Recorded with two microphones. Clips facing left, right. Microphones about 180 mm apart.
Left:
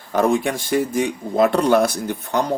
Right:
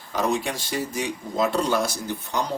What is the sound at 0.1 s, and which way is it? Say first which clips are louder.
Speech: left 6 dB; 55° left (ahead or behind).